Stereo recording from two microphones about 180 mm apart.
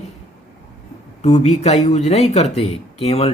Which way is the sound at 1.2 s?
40° left (ahead or behind).